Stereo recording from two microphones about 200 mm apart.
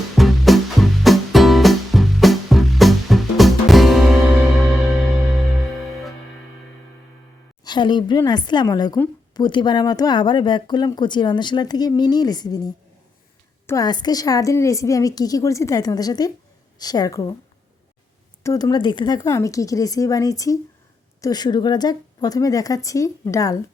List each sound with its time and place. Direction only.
0.2 s music: centre (ahead or behind)
5.3 s music: centre (ahead or behind)
7.6 s a woman's voice: 20° left (ahead or behind)
18.4 s a woman's voice: 20° left (ahead or behind)